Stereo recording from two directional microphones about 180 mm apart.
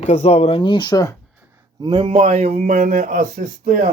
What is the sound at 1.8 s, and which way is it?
A man's voice, 25° right (ahead or behind).